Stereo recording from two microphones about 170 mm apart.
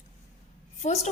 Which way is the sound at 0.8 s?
45° left (ahead or behind).